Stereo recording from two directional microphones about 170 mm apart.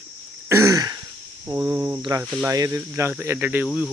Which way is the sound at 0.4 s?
15° right (ahead or behind).